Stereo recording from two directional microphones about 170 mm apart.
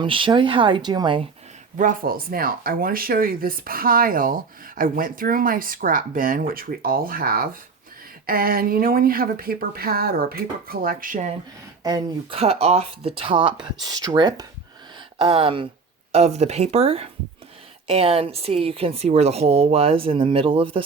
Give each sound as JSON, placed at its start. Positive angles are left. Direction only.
{"t": 0.0, "sound": "speech", "side_deg": -30}
{"t": 1.7, "sound": "speech", "side_deg": -50}
{"t": 11.8, "sound": "speech", "side_deg": -20}
{"t": 12.3, "sound": "speech", "side_deg": -35}